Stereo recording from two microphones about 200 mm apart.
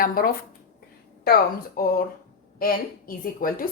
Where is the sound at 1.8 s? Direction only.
45° left (ahead or behind).